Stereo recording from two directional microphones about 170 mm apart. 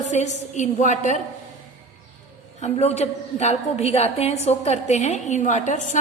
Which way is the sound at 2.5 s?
40° left (ahead or behind).